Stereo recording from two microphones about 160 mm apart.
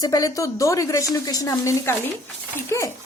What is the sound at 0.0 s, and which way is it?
A woman's voice, 25° left (ahead or behind).